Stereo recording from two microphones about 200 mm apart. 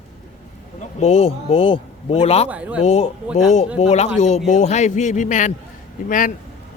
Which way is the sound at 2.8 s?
30° left (ahead or behind).